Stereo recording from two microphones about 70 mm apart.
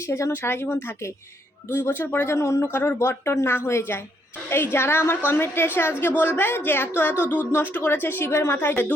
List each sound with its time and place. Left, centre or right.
0.0 s speech: left